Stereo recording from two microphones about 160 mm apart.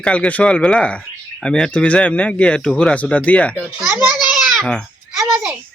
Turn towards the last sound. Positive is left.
turn(degrees=-5)  # may be behind; listen again after turning